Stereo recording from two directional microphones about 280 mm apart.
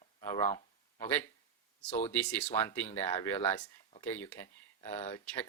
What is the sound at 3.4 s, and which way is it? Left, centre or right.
Speech, left.